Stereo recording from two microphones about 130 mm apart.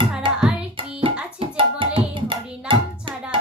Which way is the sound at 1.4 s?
40° right (ahead or behind).